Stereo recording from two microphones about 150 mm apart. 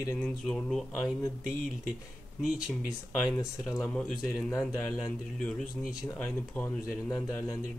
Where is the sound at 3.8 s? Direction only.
5° left (ahead or behind).